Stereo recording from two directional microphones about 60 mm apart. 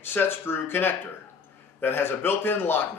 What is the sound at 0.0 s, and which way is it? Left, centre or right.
Speech, left.